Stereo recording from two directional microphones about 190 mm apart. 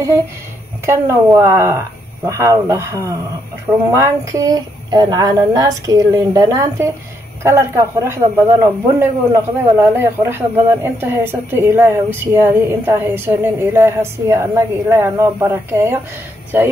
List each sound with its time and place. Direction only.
0.8 s speech: 15° right (ahead or behind)